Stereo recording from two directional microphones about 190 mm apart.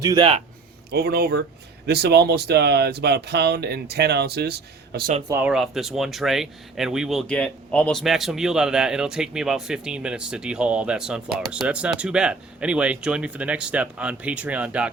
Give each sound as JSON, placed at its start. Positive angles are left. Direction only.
{"t": 0.0, "sound": "a man's voice", "side_deg": -20}
{"t": 0.9, "sound": "speech", "side_deg": -55}
{"t": 5.3, "sound": "speech", "side_deg": -5}